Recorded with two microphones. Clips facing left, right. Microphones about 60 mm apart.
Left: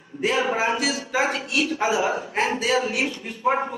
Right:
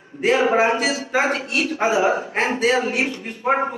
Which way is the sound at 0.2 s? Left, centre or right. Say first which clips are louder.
Right 5 dB; right.